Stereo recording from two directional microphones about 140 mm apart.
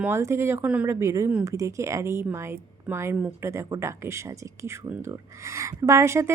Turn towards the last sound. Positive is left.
turn(degrees=-20)  # may be behind; listen again after turning